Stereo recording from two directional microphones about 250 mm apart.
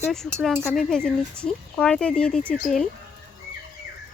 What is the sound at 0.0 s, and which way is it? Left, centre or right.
Speech, centre.